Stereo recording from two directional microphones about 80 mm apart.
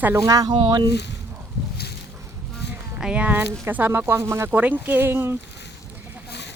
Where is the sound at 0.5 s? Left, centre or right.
Right.